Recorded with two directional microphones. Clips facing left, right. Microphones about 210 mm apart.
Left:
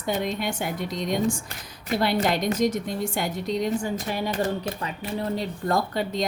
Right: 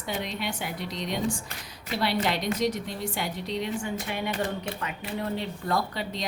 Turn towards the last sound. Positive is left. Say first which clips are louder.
# left 4 dB
turn(degrees=45)  # may be behind; listen again after turning